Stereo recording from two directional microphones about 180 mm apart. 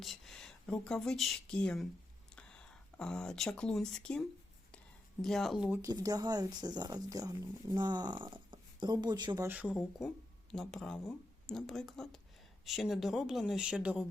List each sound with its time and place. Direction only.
0.0 s speech: centre (ahead or behind)
5.2 s speech: centre (ahead or behind)
5.9 s speech: 20° right (ahead or behind)
9.5 s speech: 5° right (ahead or behind)